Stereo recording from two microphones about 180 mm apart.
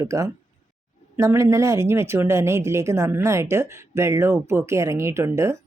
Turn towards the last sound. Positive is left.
turn(degrees=-15)  # may be behind; listen again after turning